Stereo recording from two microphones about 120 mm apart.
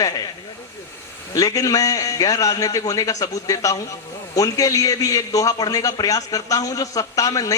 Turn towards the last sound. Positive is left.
turn(degrees=30)  # may be behind; listen again after turning